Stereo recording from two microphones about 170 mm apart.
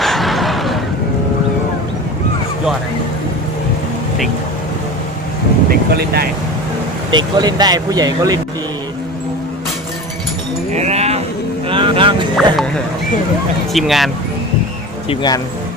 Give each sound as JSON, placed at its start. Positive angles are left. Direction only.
{"t": 0.0, "sound": "a sound", "side_deg": 0}
{"t": 5.9, "sound": "speech", "side_deg": -65}
{"t": 7.1, "sound": "speech", "side_deg": -25}
{"t": 10.7, "sound": "chink", "side_deg": -40}
{"t": 11.7, "sound": "music", "side_deg": -30}
{"t": 13.7, "sound": "speech", "side_deg": 0}
{"t": 15.1, "sound": "speech", "side_deg": 25}